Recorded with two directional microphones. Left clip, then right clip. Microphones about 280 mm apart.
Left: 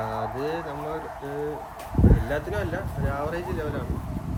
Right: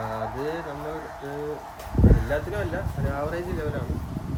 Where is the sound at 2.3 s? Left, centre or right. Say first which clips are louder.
Right 1 dB; centre.